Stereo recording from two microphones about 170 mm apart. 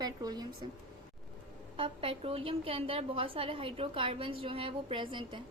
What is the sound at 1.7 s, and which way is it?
A woman's voice, 30° right (ahead or behind).